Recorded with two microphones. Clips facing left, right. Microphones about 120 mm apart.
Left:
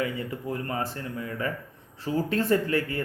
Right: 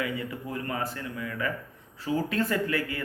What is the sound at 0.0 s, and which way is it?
Speech, 35° left (ahead or behind).